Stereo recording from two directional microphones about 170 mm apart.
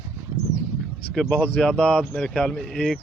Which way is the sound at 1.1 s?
5° left (ahead or behind).